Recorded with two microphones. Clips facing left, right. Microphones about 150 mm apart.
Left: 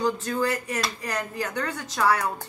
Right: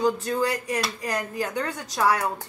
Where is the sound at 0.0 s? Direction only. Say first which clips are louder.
Right 2 dB; 15° right (ahead or behind).